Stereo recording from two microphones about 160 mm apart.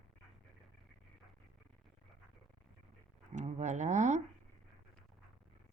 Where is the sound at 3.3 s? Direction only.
50° right (ahead or behind).